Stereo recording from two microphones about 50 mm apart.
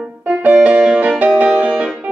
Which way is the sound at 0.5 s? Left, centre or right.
Right.